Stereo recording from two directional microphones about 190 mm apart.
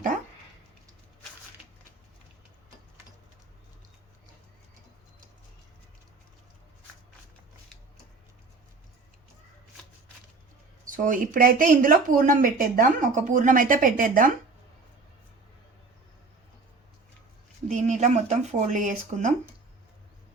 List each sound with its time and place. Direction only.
10.8 s speech: 45° right (ahead or behind)
17.7 s speech: 40° right (ahead or behind)